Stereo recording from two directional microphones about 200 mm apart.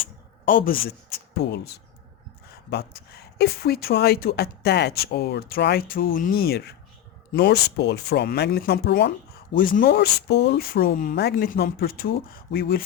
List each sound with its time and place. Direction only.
0.4 s speech: 45° left (ahead or behind)